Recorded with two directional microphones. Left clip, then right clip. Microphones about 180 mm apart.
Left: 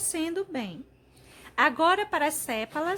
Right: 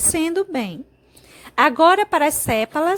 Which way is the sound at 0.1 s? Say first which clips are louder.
Right 9 dB; 40° right (ahead or behind).